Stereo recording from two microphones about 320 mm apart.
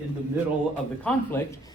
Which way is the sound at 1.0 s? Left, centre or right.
Centre.